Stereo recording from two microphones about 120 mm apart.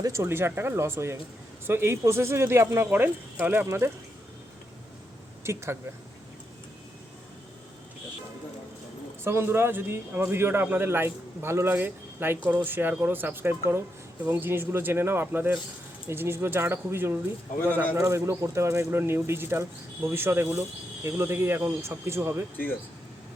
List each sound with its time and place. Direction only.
0.0 s a man's voice: 20° right (ahead or behind)
5.4 s speech: 20° right (ahead or behind)
9.2 s a man's voice: 20° right (ahead or behind)